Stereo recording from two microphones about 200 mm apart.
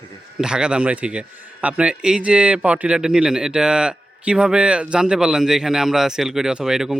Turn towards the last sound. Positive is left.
turn(degrees=0)  # may be behind; listen again after turning